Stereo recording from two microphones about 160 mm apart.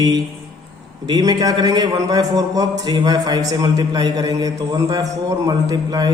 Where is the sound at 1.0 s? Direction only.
25° right (ahead or behind).